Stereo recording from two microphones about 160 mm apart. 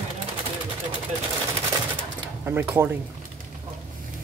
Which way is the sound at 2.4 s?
15° right (ahead or behind).